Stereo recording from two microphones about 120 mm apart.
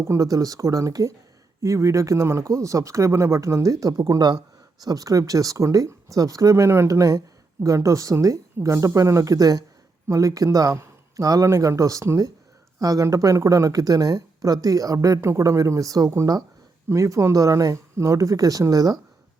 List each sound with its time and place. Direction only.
0.0 s speech: 25° right (ahead or behind)